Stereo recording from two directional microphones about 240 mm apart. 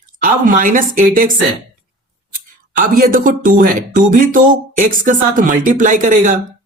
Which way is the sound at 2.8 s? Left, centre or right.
Right.